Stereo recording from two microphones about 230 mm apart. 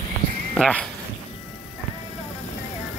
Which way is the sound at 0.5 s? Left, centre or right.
Centre.